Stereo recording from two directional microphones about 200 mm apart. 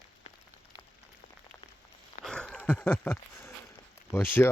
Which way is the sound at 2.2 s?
5° left (ahead or behind).